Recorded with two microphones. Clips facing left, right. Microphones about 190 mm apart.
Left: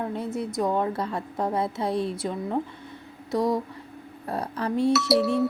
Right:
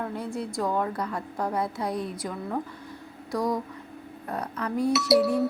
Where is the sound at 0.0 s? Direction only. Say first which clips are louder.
Left 2 dB; 20° left (ahead or behind).